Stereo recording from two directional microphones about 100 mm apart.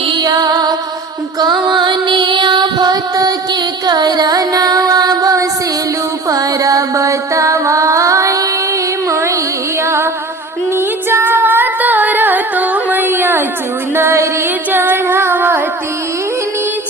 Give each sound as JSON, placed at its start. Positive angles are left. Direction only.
{"t": 0.1, "sound": "music", "side_deg": -40}
{"t": 10.8, "sound": "singing", "side_deg": -25}
{"t": 13.9, "sound": "music", "side_deg": -25}
{"t": 14.7, "sound": "female singing", "side_deg": -20}